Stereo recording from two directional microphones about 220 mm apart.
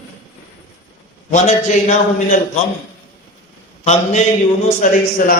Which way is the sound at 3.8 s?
30° left (ahead or behind).